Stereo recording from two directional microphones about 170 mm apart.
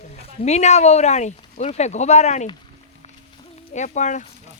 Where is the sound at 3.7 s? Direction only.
45° left (ahead or behind).